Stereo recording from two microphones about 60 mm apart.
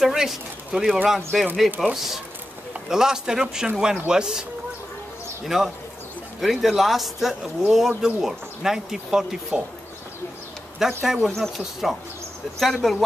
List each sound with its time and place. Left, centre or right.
0.0 s speech: centre
5.5 s speech: centre
10.8 s speech: centre